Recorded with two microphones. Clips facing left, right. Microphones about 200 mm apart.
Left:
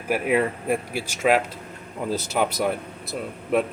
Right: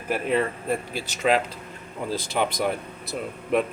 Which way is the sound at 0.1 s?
10° left (ahead or behind).